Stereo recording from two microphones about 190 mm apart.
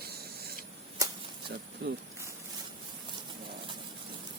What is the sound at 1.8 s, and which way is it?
Speech, 65° right (ahead or behind).